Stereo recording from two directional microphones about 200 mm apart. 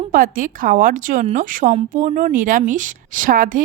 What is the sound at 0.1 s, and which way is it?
A woman's voice, 45° right (ahead or behind).